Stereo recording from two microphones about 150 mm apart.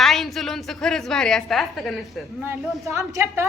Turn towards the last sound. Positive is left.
turn(degrees=-15)  # may be behind; listen again after turning